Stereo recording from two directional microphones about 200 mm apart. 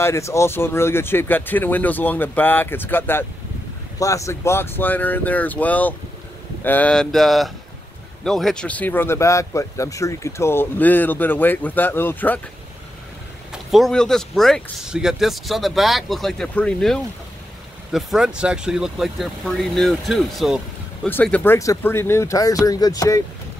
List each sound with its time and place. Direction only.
0.0 s speech: 15° left (ahead or behind)
13.5 s speech: centre (ahead or behind); by 23.2 s 15° left (ahead or behind)